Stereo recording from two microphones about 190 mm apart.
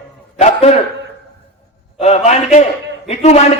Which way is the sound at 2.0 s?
35° left (ahead or behind).